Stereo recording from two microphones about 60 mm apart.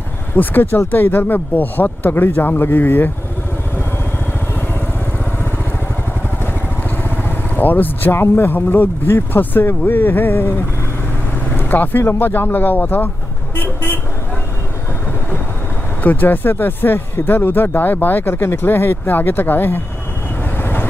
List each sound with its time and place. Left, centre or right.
0.4 s speech: left
7.2 s speech: left
11.5 s vehicle: left
12.0 s speech: left
16.0 s speech: left
20.5 s vehicle: left